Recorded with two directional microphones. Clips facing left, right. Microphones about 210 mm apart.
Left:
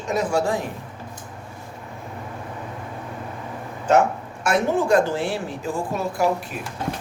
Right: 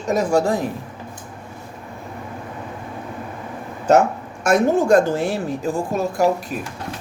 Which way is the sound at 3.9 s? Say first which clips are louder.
Right 3 dB; 40° right (ahead or behind).